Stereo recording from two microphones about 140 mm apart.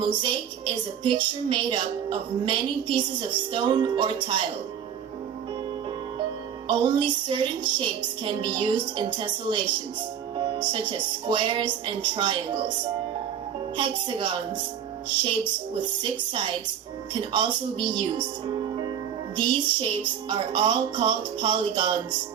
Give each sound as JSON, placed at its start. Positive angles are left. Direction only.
{"t": 0.0, "sound": "a woman's voice", "side_deg": -35}
{"t": 6.7, "sound": "a woman's voice", "side_deg": -35}
{"t": 13.7, "sound": "a woman's voice", "side_deg": -35}